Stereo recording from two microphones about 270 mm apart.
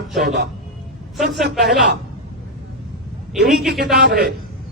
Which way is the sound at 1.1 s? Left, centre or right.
Centre.